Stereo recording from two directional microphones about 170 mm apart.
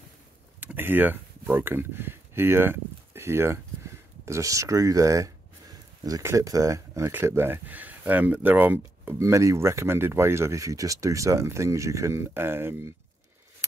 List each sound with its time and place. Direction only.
0.6 s speech: 10° right (ahead or behind)